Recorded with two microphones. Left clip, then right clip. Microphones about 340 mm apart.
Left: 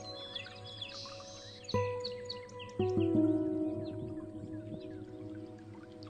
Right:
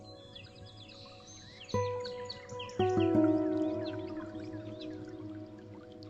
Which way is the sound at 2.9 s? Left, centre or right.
Right.